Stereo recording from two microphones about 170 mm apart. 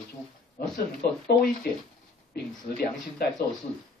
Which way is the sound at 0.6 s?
60° left (ahead or behind).